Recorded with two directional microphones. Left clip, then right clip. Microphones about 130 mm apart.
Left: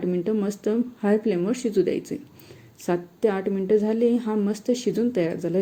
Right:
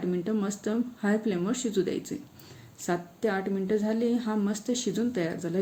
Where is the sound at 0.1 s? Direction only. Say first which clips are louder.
Left 6 dB; 15° left (ahead or behind).